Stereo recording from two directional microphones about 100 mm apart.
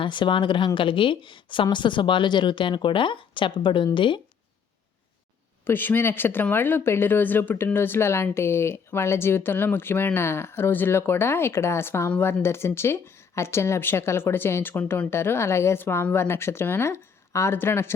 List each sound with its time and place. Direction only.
0.0 s a woman's voice: 50° left (ahead or behind)
5.6 s speech: 20° left (ahead or behind)